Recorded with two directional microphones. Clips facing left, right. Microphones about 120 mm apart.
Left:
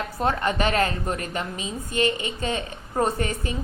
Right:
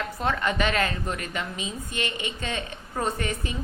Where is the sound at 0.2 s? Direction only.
35° left (ahead or behind).